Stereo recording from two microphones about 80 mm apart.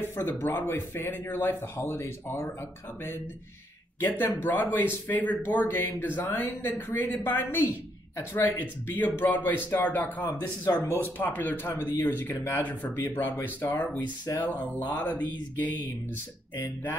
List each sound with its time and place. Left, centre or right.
0.0 s speech: left
4.0 s speech: left
10.2 s speech: left
10.8 s speech: left